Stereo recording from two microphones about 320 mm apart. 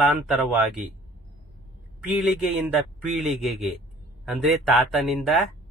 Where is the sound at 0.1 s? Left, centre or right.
Centre.